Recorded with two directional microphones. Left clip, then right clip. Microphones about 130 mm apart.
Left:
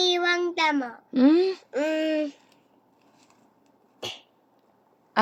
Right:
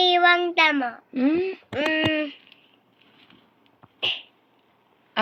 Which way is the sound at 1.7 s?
5° left (ahead or behind).